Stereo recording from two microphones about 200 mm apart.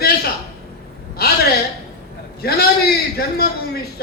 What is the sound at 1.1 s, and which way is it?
A man's voice, 50° left (ahead or behind).